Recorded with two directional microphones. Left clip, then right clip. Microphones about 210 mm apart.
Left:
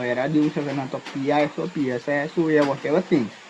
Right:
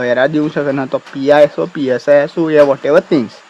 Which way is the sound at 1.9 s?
30° right (ahead or behind).